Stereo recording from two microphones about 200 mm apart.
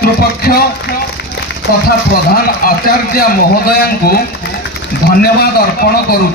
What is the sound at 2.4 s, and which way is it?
A man's voice, 50° left (ahead or behind).